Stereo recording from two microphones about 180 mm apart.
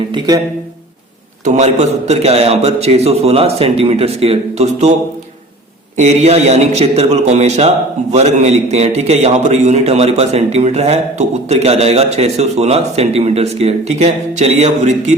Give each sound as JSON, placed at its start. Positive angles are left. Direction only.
{"t": 1.5, "sound": "a man's voice", "side_deg": -40}
{"t": 6.0, "sound": "a man's voice", "side_deg": -35}